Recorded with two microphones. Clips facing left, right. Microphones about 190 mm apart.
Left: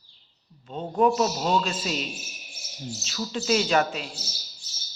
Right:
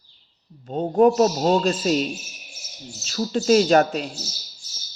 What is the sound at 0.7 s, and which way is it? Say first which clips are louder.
Speech: right 6 dB; 45° right (ahead or behind).